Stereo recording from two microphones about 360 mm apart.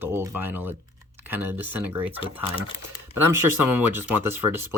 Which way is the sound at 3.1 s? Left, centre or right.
Centre.